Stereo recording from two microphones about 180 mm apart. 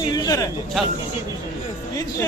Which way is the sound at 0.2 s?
20° left (ahead or behind).